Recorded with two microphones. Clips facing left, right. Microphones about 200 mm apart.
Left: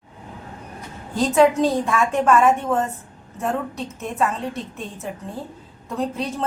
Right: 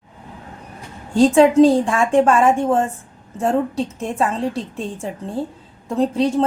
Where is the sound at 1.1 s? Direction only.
30° right (ahead or behind).